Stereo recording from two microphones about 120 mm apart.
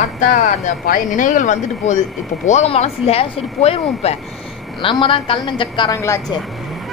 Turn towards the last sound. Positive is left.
turn(degrees=25)  # may be behind; listen again after turning